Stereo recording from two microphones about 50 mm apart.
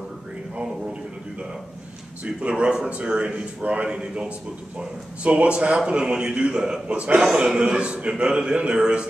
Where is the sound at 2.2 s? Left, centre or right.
Centre.